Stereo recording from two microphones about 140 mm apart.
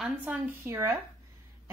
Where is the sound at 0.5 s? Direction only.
20° right (ahead or behind).